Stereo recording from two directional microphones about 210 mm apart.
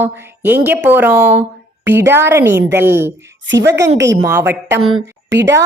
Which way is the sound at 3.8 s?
60° right (ahead or behind).